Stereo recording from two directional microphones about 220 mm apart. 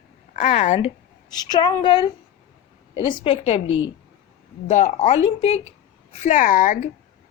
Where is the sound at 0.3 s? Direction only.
35° left (ahead or behind).